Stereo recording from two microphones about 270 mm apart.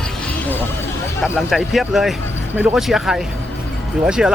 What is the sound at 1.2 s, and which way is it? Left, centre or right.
Speech, centre.